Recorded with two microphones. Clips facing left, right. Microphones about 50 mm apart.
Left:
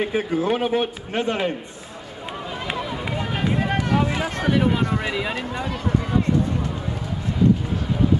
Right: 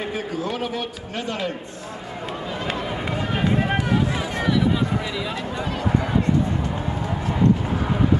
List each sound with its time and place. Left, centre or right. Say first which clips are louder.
0.1 s a man's voice: left 5 dB; left
3.1 s run: right 2 dB; centre
4.1 s a sound: left 1 dB; left